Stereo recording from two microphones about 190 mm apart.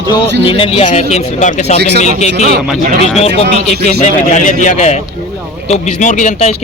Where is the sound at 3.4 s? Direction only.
55° right (ahead or behind).